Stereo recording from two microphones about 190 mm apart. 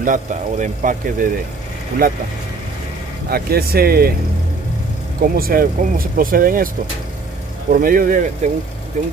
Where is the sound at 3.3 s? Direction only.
55° right (ahead or behind).